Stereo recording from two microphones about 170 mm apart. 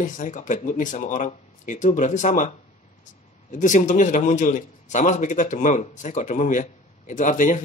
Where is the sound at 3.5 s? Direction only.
50° left (ahead or behind).